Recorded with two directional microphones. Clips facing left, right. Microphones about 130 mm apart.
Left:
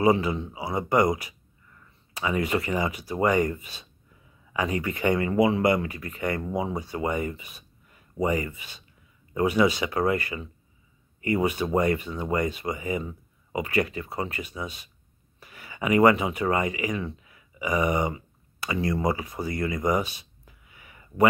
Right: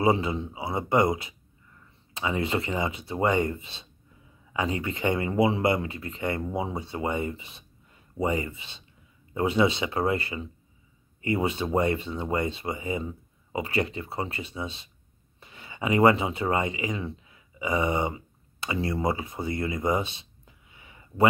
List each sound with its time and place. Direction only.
0.0 s speech: 25° right (ahead or behind)